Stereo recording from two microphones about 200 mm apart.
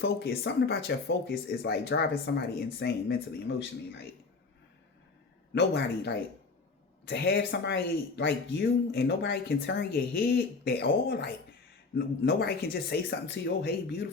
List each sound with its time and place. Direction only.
0.3 s speech: 55° left (ahead or behind)
5.5 s speech: 55° left (ahead or behind)